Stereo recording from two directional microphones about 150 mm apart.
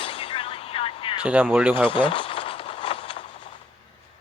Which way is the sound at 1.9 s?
35° left (ahead or behind).